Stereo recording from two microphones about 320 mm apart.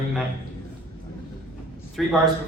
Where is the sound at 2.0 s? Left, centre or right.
Centre.